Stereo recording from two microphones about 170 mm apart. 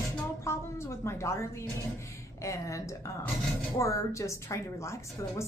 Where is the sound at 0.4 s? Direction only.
15° left (ahead or behind).